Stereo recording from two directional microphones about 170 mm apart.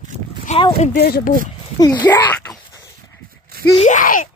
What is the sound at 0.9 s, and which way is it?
Speech, 60° left (ahead or behind).